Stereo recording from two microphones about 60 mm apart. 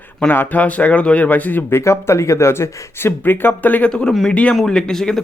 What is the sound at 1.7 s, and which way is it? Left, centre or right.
Speech, left.